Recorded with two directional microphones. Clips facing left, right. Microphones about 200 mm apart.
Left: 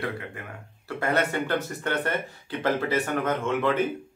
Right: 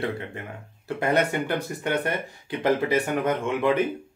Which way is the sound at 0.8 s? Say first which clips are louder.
Right 3 dB; 15° right (ahead or behind).